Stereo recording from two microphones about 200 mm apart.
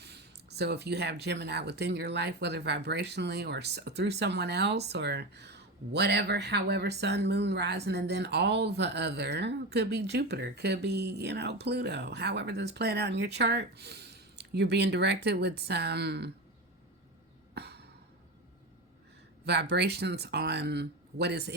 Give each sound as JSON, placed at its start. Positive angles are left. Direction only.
{"t": 0.0, "sound": "speech", "side_deg": -55}
{"t": 17.5, "sound": "a sound", "side_deg": -55}
{"t": 19.5, "sound": "speech", "side_deg": -55}